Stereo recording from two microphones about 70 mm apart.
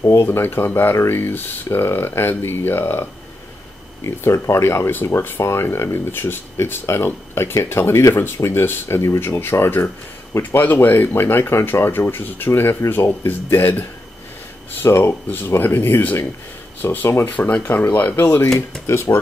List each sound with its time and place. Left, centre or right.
0.1 s speech: left
4.2 s speech: left
14.9 s speech: left